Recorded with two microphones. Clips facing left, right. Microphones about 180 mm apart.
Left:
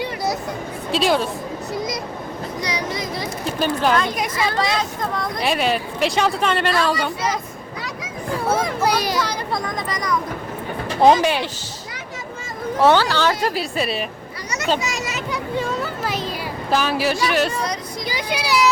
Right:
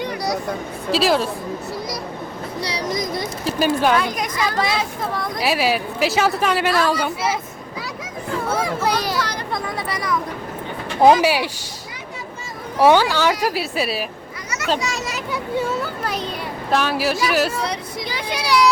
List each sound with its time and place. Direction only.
0.9 s speech: centre (ahead or behind)
2.6 s speech: 30° right (ahead or behind)
3.4 s speech: 5° right (ahead or behind)
8.5 s speech: centre (ahead or behind)
9.0 s speech: 15° left (ahead or behind)
9.5 s speech: 5° right (ahead or behind)
12.8 s speech: 10° right (ahead or behind)
15.0 s speech: centre (ahead or behind)